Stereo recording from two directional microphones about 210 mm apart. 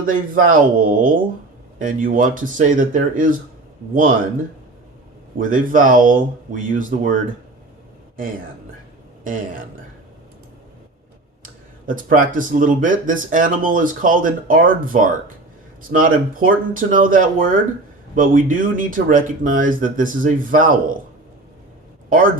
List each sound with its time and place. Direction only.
0.0 s speech: 40° right (ahead or behind)
5.4 s speech: 40° right (ahead or behind)
9.2 s speech: 40° right (ahead or behind)
11.9 s speech: 40° right (ahead or behind)